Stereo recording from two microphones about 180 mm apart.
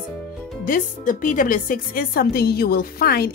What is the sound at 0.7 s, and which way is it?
A woman's voice, 50° left (ahead or behind).